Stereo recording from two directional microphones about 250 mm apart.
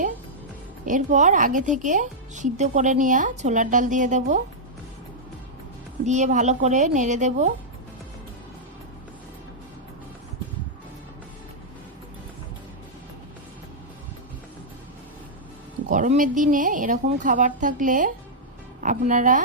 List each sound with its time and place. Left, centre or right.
0.9 s a woman's voice: right
6.1 s a woman's voice: right
15.9 s a woman's voice: right